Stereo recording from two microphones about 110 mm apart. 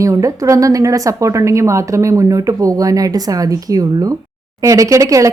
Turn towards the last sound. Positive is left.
turn(degrees=-30)  # may be behind; listen again after turning